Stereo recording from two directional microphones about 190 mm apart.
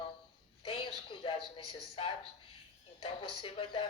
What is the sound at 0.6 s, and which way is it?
A woman's voice, 25° left (ahead or behind).